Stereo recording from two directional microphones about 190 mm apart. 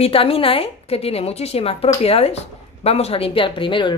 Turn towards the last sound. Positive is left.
turn(degrees=25)  # may be behind; listen again after turning